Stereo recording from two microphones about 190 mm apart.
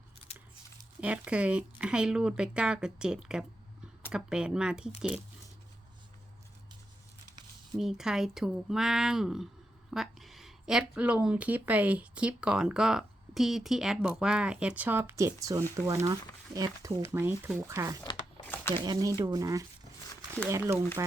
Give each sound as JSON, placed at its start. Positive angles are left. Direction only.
{"t": 1.0, "sound": "speech", "side_deg": -5}
{"t": 7.8, "sound": "speech", "side_deg": 0}
{"t": 18.4, "sound": "a sound", "side_deg": 10}
{"t": 18.7, "sound": "speech", "side_deg": -20}